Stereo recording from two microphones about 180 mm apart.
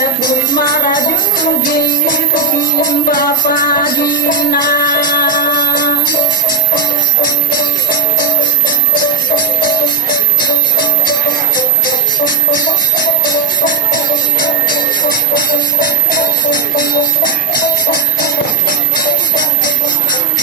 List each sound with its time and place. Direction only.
0.2 s music: 55° left (ahead or behind)
8.2 s music: 50° left (ahead or behind)
11.5 s music: 50° left (ahead or behind)
15.4 s music: 50° left (ahead or behind)